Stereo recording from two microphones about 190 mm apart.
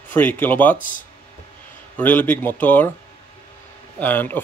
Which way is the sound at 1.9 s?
10° left (ahead or behind).